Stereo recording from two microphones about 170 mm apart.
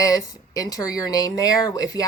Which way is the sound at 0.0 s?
20° left (ahead or behind).